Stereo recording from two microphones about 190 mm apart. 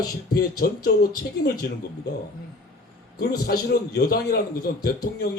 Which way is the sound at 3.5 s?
55° left (ahead or behind).